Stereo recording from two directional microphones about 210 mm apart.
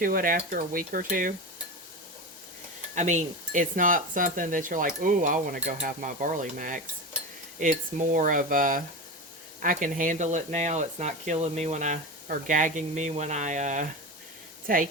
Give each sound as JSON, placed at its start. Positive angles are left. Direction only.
{"t": 0.0, "sound": "speech", "side_deg": -40}
{"t": 2.9, "sound": "speech", "side_deg": -35}